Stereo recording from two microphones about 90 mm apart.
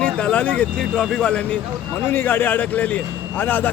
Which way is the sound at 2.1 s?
20° left (ahead or behind).